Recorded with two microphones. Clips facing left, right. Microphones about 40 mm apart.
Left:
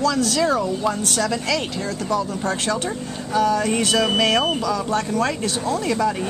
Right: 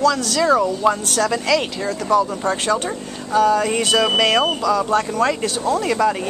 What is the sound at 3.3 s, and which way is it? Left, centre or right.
Speech, right.